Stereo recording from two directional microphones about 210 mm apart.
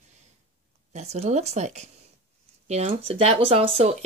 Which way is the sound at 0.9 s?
30° right (ahead or behind).